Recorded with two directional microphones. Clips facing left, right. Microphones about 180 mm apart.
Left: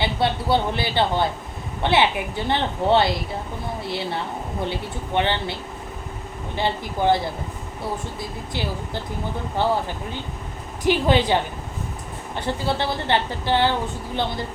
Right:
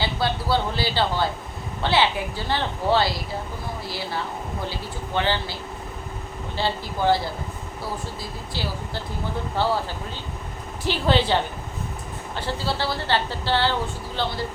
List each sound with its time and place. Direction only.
0.0 s a woman's voice: 25° left (ahead or behind)
6.6 s a woman's voice: 20° left (ahead or behind)
9.6 s a woman's voice: 20° left (ahead or behind)
10.8 s a woman's voice: 15° left (ahead or behind)
12.4 s a woman's voice: 20° left (ahead or behind)